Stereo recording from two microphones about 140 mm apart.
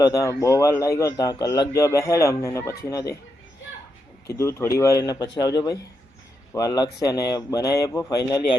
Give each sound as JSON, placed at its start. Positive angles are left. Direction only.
{"t": 0.0, "sound": "a man's voice", "side_deg": 25}
{"t": 4.3, "sound": "a man's voice", "side_deg": 20}